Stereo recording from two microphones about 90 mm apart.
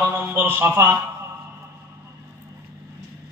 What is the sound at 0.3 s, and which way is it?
Speech, 25° right (ahead or behind).